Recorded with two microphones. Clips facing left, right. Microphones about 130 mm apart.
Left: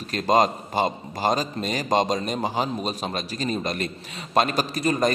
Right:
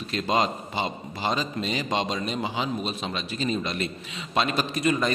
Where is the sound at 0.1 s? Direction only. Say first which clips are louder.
Left 5 dB; 45° left (ahead or behind).